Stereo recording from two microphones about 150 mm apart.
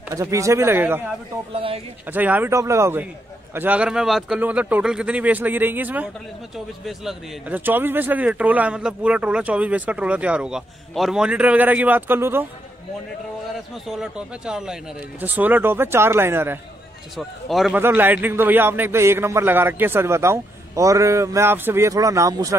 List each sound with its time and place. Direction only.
0.1 s speech: 20° right (ahead or behind)
1.5 s speech: 40° right (ahead or behind)
2.0 s speech: 10° right (ahead or behind)
13.8 s speech: 5° right (ahead or behind)
17.2 s speech: centre (ahead or behind)
17.7 s speech: 15° right (ahead or behind)